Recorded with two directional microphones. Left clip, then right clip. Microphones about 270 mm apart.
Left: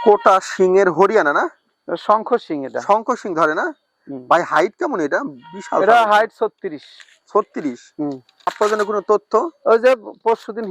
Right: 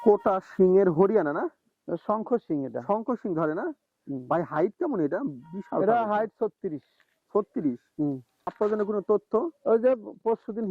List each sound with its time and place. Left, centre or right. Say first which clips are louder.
0.0 s speech: left 10 dB; centre
8.4 s speech: left 9 dB; centre